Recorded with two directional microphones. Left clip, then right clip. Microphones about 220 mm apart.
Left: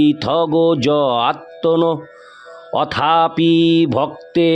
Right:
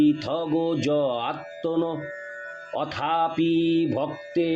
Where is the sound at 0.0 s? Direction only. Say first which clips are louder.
Left 8 dB; 50° left (ahead or behind).